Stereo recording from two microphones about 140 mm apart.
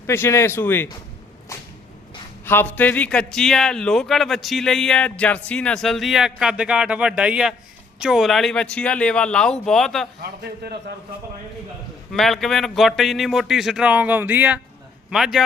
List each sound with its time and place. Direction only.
0.1 s speech: 20° left (ahead or behind)
2.4 s a man's voice: 15° left (ahead or behind)
12.1 s a man's voice: 5° left (ahead or behind)